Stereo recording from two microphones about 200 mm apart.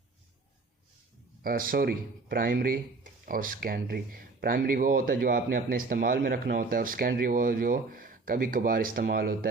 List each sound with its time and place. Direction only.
1.5 s speech: 45° right (ahead or behind)